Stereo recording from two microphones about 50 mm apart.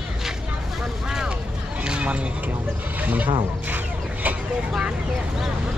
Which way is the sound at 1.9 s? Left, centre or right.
Right.